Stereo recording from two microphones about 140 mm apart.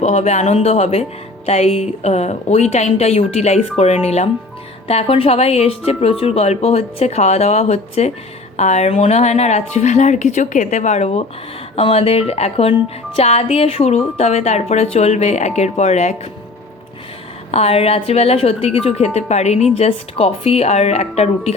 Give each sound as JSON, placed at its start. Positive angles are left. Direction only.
{"t": 0.0, "sound": "speech", "side_deg": 50}
{"t": 17.5, "sound": "speech", "side_deg": 45}